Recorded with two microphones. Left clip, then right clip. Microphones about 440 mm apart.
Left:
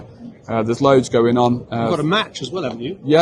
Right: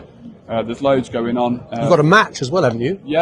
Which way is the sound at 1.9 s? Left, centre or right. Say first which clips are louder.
Right 10 dB; centre.